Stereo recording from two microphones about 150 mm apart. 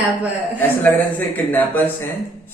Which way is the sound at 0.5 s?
10° left (ahead or behind).